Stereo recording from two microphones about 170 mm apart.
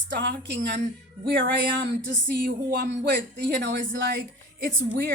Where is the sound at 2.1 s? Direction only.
60° right (ahead or behind); by 4.2 s 90° right.